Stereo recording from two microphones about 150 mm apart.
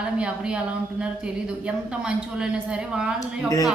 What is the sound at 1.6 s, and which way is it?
A woman's voice, 5° right (ahead or behind).